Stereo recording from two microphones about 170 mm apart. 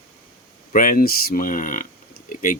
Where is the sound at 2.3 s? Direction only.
55° left (ahead or behind).